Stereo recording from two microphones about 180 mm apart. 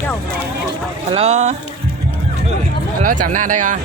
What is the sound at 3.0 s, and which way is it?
Speech, 45° right (ahead or behind).